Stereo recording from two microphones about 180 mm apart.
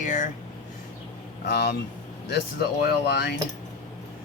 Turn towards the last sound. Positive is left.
turn(degrees=70)  # may be behind; listen again after turning